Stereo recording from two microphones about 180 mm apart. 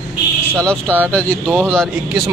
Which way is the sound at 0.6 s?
5° left (ahead or behind).